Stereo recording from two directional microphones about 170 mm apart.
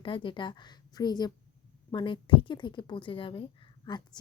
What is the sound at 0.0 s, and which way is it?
A woman's voice, 30° left (ahead or behind).